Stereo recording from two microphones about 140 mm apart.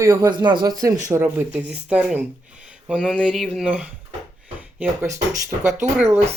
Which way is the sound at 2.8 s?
5° right (ahead or behind).